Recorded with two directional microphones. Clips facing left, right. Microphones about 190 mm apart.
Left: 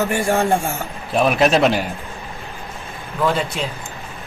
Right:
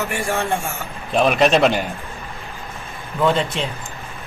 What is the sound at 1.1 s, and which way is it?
Speech, centre (ahead or behind).